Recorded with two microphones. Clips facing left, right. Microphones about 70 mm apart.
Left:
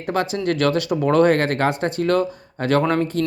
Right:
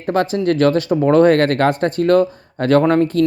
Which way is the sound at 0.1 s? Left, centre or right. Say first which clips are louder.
Right 5 dB; right.